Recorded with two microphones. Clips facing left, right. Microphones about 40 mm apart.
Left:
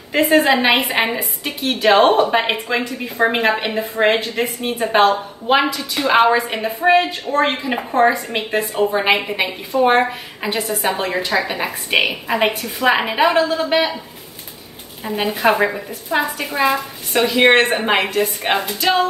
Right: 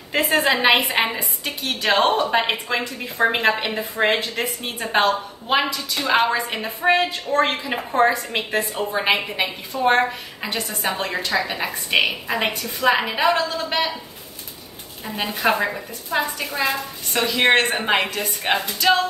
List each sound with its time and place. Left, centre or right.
0.1 s a woman's voice: centre
2.7 s a woman's voice: centre
15.0 s a woman's voice: centre